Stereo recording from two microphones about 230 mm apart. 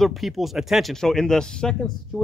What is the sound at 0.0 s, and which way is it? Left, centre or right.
Speech, centre.